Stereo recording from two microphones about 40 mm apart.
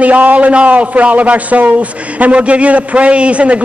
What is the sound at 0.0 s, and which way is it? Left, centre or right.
A man's voice, right.